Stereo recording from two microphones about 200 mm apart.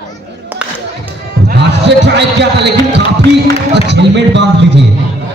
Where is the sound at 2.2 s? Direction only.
60° right (ahead or behind).